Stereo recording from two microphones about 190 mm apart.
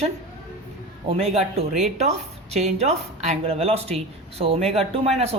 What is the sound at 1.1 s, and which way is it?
A woman's voice, 30° right (ahead or behind).